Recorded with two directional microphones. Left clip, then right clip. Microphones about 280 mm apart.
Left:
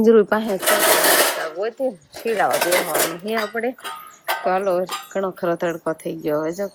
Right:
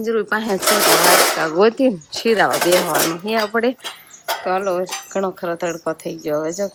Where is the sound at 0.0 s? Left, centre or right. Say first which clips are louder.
Left 5 dB; centre.